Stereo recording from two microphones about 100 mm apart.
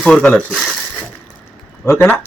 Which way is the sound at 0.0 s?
10° left (ahead or behind).